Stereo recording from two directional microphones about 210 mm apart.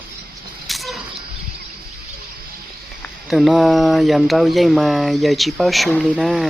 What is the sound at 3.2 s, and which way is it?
Speech, centre (ahead or behind).